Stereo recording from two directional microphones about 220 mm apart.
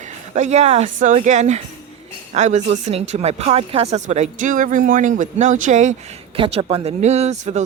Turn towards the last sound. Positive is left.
turn(degrees=-30)  # may be behind; listen again after turning